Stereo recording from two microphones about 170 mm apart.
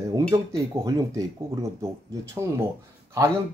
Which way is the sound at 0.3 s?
20° right (ahead or behind).